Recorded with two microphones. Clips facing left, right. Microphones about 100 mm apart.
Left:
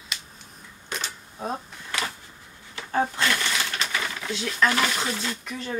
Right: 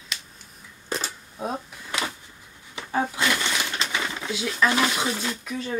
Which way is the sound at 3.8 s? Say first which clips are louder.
Right 1 dB; 20° right (ahead or behind).